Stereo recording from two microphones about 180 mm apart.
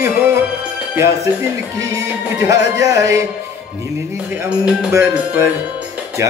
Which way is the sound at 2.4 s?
20° right (ahead or behind).